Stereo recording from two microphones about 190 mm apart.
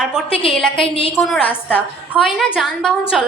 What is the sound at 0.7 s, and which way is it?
Speech, 30° left (ahead or behind).